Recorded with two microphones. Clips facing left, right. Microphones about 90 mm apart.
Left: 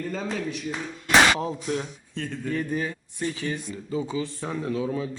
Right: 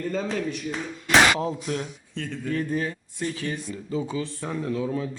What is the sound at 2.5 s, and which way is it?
Speech, 10° left (ahead or behind).